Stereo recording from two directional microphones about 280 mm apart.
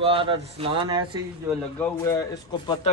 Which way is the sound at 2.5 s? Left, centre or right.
Centre.